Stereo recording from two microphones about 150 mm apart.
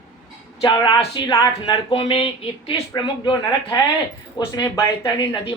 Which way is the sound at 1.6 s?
35° left (ahead or behind).